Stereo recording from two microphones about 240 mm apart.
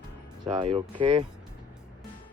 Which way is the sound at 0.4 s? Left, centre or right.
Centre.